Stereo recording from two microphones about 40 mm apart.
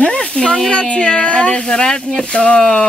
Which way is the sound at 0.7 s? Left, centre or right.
Left.